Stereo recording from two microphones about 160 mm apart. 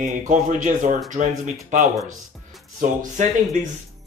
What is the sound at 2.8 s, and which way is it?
Speech, 50° right (ahead or behind).